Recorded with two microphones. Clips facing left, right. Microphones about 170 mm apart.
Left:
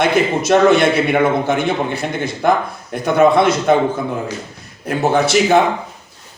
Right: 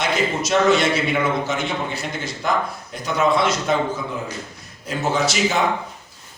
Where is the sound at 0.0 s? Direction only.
55° left (ahead or behind).